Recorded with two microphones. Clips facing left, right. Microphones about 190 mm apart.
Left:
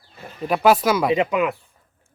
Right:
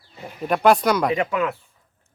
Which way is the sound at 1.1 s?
15° left (ahead or behind).